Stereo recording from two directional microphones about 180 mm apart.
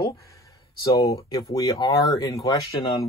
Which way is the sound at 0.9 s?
20° left (ahead or behind).